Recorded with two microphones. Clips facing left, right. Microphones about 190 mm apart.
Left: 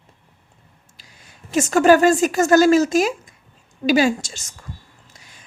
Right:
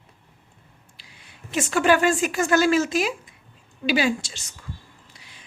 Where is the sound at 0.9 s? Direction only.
45° left (ahead or behind).